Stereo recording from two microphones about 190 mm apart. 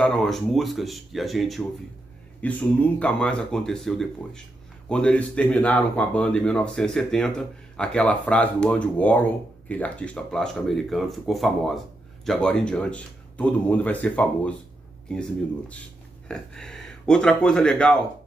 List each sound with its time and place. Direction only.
0.0 s speech: centre (ahead or behind)
16.3 s speech: 5° left (ahead or behind)